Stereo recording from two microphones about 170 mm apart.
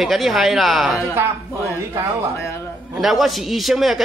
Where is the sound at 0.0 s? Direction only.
Centre (ahead or behind).